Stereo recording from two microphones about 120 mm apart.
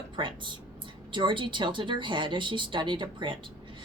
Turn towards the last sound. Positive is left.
turn(degrees=-40)  # may be behind; listen again after turning